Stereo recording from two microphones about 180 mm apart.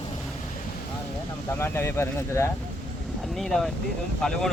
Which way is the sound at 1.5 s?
15° left (ahead or behind).